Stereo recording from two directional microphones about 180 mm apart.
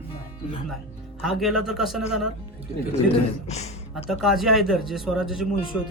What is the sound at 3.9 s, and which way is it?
A man's voice, centre (ahead or behind).